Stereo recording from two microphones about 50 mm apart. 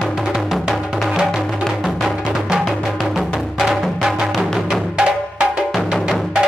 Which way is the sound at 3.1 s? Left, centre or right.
Centre.